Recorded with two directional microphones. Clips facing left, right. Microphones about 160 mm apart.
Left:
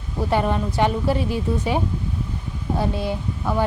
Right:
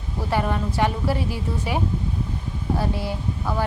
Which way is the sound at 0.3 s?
20° left (ahead or behind).